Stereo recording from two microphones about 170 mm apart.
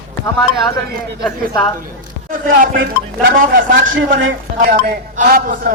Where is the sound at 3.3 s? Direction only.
55° right (ahead or behind).